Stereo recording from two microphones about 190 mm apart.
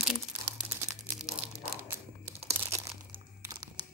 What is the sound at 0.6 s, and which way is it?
Crumpling, 15° right (ahead or behind).